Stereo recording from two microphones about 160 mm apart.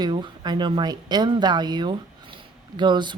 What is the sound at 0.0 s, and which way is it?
A woman's voice, 30° right (ahead or behind).